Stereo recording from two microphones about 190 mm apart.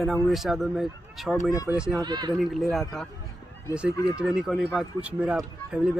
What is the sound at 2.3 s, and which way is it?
Speech, centre (ahead or behind).